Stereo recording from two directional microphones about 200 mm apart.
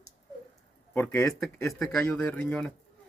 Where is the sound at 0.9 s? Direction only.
10° left (ahead or behind).